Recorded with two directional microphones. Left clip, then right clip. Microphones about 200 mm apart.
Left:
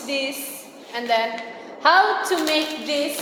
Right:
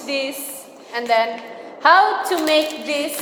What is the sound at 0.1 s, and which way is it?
A woman's voice, 20° right (ahead or behind).